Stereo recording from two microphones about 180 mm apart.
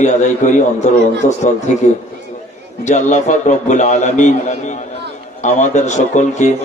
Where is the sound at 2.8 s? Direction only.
40° left (ahead or behind).